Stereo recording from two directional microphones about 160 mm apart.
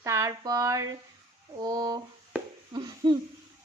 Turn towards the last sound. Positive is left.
turn(degrees=-25)  # may be behind; listen again after turning